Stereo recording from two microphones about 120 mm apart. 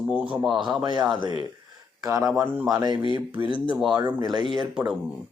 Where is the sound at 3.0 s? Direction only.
45° left (ahead or behind).